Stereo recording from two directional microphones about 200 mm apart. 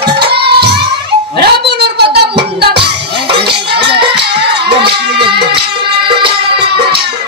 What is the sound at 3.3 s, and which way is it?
Music, 55° right (ahead or behind).